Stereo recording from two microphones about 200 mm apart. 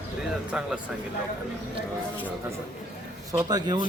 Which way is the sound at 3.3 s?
20° right (ahead or behind).